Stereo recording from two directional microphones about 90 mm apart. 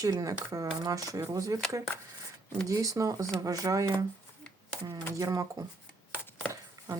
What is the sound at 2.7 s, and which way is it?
Speech, 35° right (ahead or behind).